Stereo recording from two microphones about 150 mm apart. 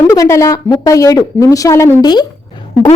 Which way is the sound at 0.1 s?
20° left (ahead or behind).